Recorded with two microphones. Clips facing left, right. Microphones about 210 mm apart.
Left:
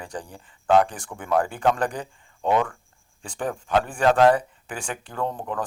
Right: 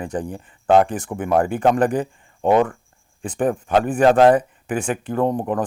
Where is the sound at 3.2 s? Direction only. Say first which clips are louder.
Right 8 dB; 20° right (ahead or behind).